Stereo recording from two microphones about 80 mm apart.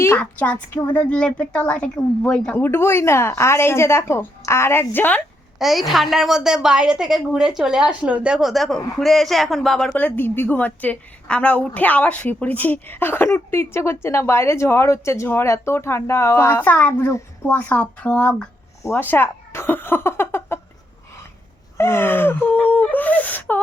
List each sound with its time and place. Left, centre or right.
0.2 s a woman's voice: centre
2.6 s speech: left
5.5 s a woman's voice: centre
9.9 s a woman's voice: left
16.5 s a woman's voice: left
18.9 s speech: left
21.8 s a woman's voice: left